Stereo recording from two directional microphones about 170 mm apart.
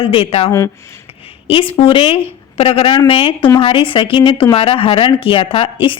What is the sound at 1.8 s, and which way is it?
Speech, 30° left (ahead or behind).